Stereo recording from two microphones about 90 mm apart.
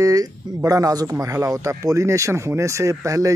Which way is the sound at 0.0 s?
40° right (ahead or behind).